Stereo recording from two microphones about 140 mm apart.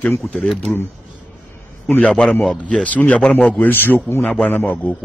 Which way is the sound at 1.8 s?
10° left (ahead or behind).